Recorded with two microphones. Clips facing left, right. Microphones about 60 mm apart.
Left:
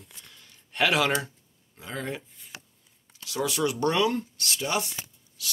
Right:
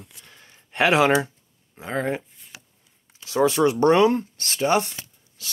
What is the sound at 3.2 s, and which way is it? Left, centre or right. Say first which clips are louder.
Speech: right 8 dB; right.